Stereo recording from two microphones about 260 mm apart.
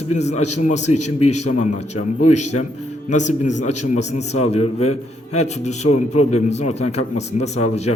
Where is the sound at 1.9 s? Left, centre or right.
Left.